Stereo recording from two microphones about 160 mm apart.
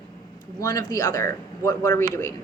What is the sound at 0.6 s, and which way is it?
A woman's voice, 20° left (ahead or behind).